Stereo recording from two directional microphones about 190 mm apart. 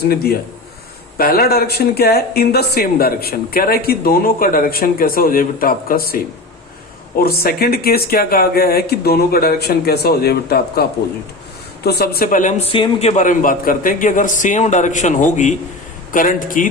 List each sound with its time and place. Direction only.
1.2 s speech: 50° left (ahead or behind)
7.2 s speech: 55° left (ahead or behind)